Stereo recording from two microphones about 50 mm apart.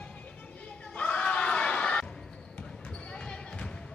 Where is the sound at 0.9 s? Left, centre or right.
Left.